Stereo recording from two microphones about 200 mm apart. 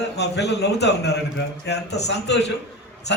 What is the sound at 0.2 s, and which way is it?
A man's voice, 55° left (ahead or behind).